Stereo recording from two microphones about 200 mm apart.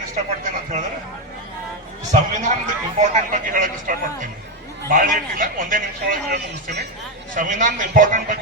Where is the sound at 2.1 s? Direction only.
40° right (ahead or behind).